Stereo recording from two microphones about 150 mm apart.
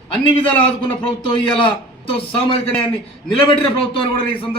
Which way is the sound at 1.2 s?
35° left (ahead or behind).